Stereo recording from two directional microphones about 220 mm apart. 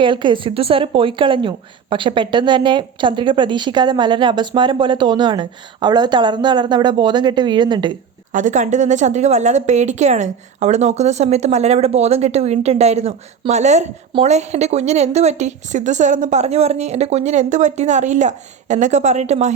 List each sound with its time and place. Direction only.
0.0 s speech: 20° right (ahead or behind)
8.3 s a woman's voice: 35° right (ahead or behind)